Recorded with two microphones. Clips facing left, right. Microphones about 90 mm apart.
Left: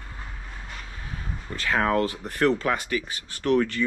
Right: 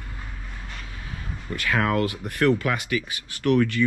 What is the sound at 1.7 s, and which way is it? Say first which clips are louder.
Speech: even; 25° left (ahead or behind).